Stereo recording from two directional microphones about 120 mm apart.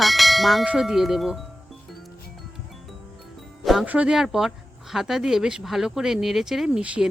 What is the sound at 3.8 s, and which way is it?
Speech, 10° right (ahead or behind).